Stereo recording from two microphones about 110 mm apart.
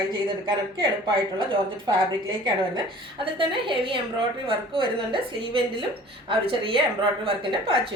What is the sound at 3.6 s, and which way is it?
Speech, 50° right (ahead or behind).